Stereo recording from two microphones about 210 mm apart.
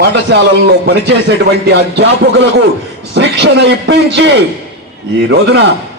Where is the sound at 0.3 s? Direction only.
55° right (ahead or behind).